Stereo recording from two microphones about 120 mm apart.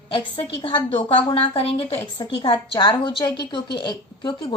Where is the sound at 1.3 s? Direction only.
50° left (ahead or behind).